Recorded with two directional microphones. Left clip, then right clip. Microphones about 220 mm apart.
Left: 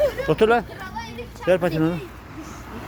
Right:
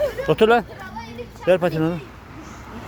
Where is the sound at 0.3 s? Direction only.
30° right (ahead or behind).